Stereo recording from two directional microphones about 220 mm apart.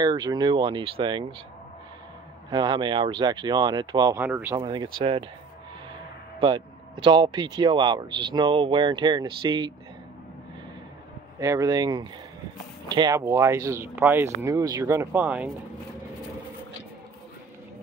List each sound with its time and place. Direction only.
0.0 s speech: 20° right (ahead or behind)
2.5 s speech: 20° right (ahead or behind)
4.6 s speech: 20° right (ahead or behind)
6.4 s speech: 20° right (ahead or behind)
11.3 s speech: 15° right (ahead or behind)